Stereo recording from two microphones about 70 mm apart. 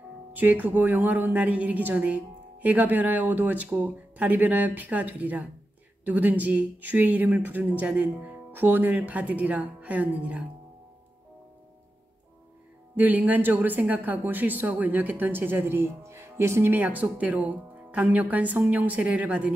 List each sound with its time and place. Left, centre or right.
0.3 s speech: right
12.9 s speech: right
16.7 s speech: right